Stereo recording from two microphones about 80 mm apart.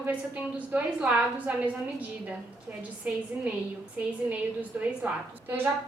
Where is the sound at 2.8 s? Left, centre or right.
Centre.